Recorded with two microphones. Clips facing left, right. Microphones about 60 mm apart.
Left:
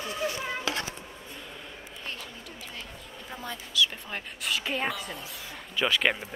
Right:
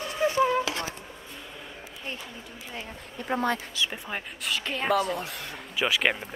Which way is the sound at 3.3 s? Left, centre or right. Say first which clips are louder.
Right 12 dB; right.